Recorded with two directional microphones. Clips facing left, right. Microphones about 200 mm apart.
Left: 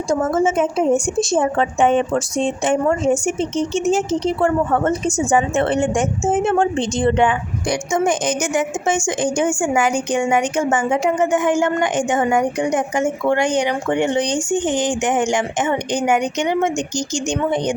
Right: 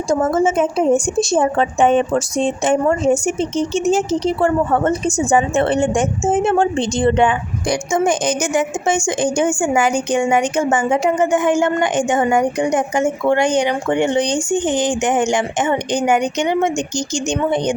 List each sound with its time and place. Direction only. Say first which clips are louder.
0.1 s a woman's voice: right 2 dB; 35° right (ahead or behind)